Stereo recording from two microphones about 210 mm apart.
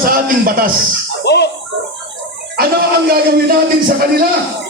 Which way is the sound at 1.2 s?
50° left (ahead or behind).